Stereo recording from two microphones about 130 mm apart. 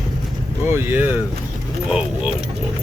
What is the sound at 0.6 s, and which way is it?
Speech, 15° right (ahead or behind).